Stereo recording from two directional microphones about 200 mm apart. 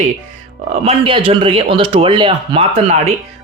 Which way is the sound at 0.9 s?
25° right (ahead or behind).